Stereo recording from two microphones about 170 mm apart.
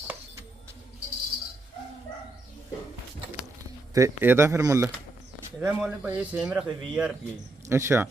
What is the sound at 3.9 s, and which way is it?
Speech, 15° right (ahead or behind).